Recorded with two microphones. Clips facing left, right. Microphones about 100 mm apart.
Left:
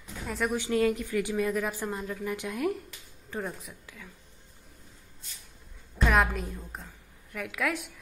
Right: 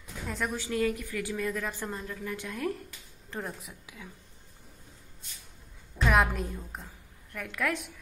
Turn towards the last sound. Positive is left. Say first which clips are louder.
# left 1 dB
turn(degrees=0)  # may be behind; listen again after turning